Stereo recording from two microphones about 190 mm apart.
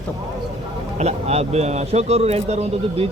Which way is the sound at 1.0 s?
35° right (ahead or behind).